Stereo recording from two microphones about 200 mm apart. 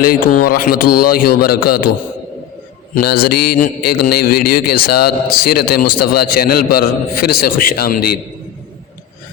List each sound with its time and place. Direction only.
0.0 s a man's voice: 45° left (ahead or behind)
2.9 s a man's voice: 50° left (ahead or behind)